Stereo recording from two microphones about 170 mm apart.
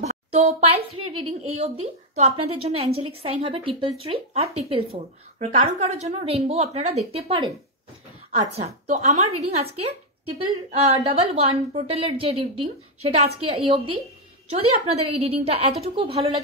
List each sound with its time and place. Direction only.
0.0 s speech: 40° right (ahead or behind)
14.5 s speech: 35° right (ahead or behind)